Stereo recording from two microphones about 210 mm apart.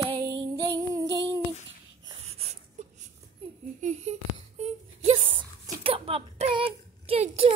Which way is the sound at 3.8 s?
35° right (ahead or behind).